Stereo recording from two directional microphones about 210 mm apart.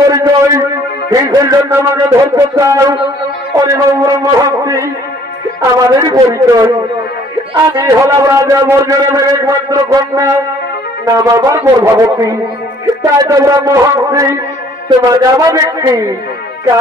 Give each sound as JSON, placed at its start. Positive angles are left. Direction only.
{"t": 0.1, "sound": "a man's voice", "side_deg": -15}
{"t": 5.9, "sound": "a man's voice", "side_deg": -15}
{"t": 7.7, "sound": "a man's voice", "side_deg": -15}